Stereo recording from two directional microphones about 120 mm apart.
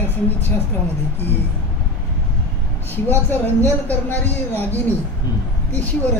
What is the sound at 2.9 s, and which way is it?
Speech, 15° left (ahead or behind).